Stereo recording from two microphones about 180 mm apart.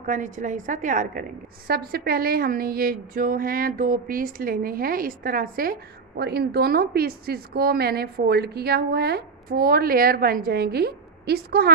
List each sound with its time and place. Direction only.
0.0 s a woman's voice: 45° right (ahead or behind)
1.7 s a woman's voice: 60° right (ahead or behind)